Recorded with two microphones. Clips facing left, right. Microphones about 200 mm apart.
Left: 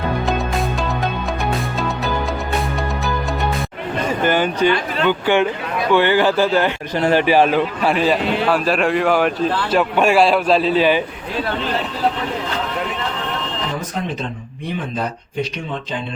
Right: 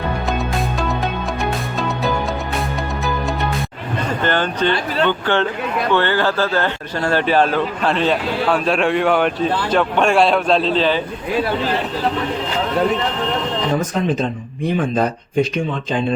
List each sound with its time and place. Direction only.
4.2 s a man's voice: 10° left (ahead or behind)
15.4 s speech: 50° right (ahead or behind)